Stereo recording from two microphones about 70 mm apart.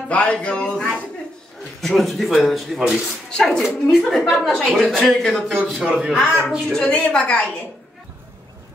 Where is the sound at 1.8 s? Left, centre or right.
Centre.